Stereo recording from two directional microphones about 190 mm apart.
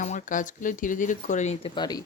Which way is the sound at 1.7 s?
20° left (ahead or behind).